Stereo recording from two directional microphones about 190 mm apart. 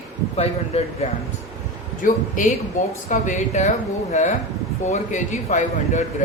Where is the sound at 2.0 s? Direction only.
45° left (ahead or behind).